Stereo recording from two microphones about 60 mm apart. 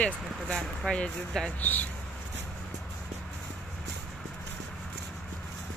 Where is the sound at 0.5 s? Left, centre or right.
Centre.